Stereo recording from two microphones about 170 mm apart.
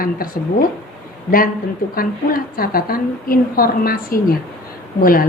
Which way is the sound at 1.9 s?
60° left (ahead or behind).